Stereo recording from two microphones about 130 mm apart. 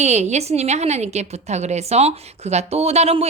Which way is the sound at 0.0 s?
60° right (ahead or behind).